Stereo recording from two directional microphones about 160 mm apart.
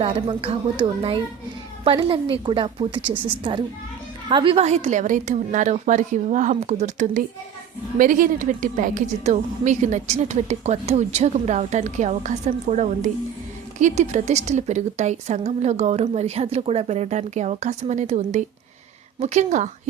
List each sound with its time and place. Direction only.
0.0 s a woman's voice: 35° right (ahead or behind)